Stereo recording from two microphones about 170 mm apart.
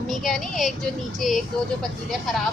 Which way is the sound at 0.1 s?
Centre (ahead or behind).